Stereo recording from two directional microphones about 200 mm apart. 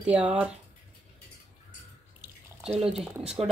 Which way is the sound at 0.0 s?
5° right (ahead or behind).